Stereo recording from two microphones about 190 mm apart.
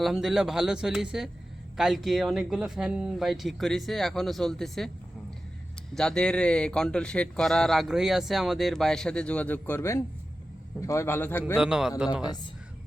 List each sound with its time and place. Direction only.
0.0 s speech: centre (ahead or behind)
5.9 s a man's voice: 5° left (ahead or behind)
11.5 s speech: 5° right (ahead or behind)